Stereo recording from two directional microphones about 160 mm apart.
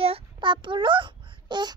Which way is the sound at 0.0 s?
35° right (ahead or behind).